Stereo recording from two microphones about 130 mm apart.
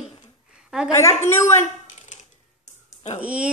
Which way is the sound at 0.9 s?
20° left (ahead or behind).